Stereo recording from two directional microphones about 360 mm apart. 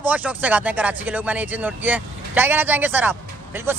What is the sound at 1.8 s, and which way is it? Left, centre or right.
Speech, centre.